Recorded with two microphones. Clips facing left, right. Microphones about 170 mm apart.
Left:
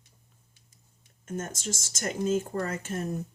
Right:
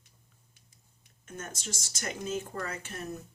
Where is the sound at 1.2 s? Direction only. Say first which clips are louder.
Left 7 dB; 45° left (ahead or behind).